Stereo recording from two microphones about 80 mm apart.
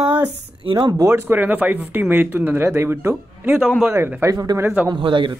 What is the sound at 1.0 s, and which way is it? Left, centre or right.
Speech, right.